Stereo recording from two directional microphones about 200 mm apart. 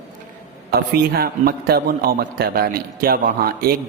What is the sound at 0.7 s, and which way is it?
A man's voice, 50° right (ahead or behind).